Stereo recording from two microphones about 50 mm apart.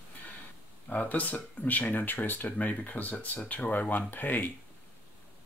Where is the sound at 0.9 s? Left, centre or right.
Left.